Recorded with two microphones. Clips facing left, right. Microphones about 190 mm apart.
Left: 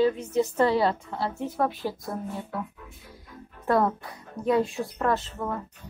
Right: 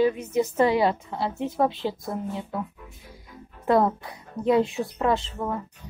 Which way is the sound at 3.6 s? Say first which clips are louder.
Right 3 dB; 15° right (ahead or behind).